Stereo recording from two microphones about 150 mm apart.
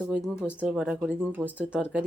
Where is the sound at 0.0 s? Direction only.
5° right (ahead or behind).